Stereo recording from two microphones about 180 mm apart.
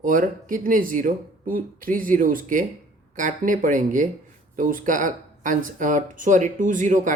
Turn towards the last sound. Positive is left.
turn(degrees=-45)  # may be behind; listen again after turning